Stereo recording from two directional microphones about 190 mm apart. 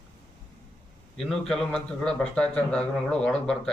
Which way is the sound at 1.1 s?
5° left (ahead or behind).